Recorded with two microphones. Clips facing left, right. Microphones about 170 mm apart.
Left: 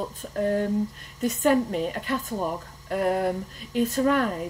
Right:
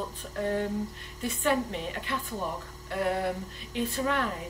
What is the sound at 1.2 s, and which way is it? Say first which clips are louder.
Speech: left 6 dB; 40° left (ahead or behind).